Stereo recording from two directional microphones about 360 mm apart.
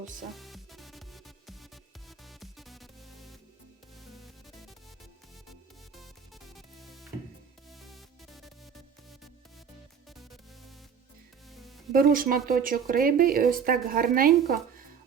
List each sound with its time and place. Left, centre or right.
0.3 s music: centre
6.5 s music: centre
11.9 s speech: right